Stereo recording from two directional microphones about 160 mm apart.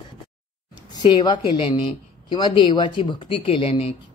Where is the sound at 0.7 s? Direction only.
30° left (ahead or behind).